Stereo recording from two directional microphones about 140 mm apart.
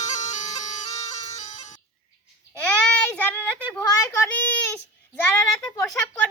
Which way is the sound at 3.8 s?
25° left (ahead or behind).